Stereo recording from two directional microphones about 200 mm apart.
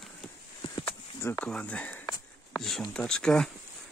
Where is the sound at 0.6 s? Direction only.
20° left (ahead or behind).